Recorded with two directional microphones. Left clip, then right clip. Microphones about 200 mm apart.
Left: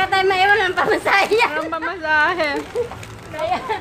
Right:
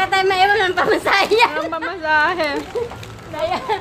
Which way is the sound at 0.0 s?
15° right (ahead or behind).